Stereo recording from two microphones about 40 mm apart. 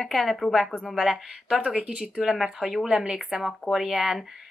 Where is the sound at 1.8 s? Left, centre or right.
Right.